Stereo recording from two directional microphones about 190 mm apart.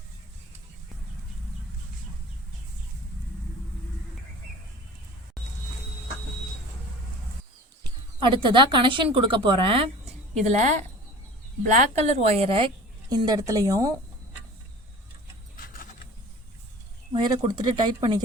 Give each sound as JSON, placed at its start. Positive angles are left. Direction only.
{"t": 7.9, "sound": "speech", "side_deg": -25}
{"t": 10.4, "sound": "a woman's voice", "side_deg": -40}
{"t": 11.7, "sound": "a woman's voice", "side_deg": -40}
{"t": 15.5, "sound": "a sound", "side_deg": 50}
{"t": 17.1, "sound": "speech", "side_deg": -25}